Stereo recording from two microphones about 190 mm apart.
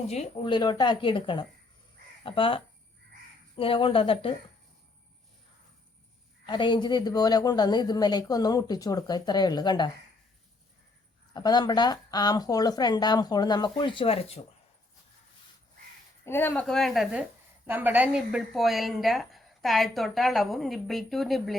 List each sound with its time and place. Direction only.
0.1 s a woman's voice: 30° left (ahead or behind)
6.4 s a woman's voice: 25° left (ahead or behind)
11.3 s a woman's voice: 20° left (ahead or behind)
16.2 s a woman's voice: 10° left (ahead or behind)